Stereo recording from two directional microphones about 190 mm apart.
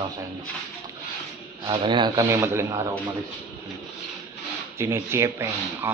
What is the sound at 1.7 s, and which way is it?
Speech, 25° right (ahead or behind).